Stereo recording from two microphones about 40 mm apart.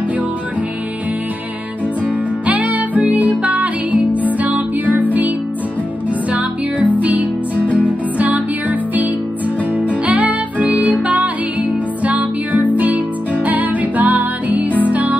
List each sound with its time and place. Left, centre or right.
2.4 s music: right
6.0 s music: right